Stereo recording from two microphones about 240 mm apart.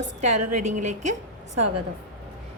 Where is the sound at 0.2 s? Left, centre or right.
Right.